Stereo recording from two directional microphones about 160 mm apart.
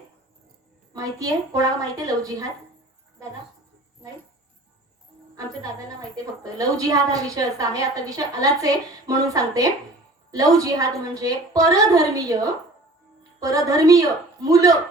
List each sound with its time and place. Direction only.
0.9 s a woman's voice: 20° right (ahead or behind)
4.0 s cricket: 5° right (ahead or behind)
6.4 s a woman's voice: 20° right (ahead or behind)
13.4 s a woman's voice: 20° right (ahead or behind)